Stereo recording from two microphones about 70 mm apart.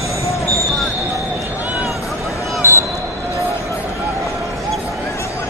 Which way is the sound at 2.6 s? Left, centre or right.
Left.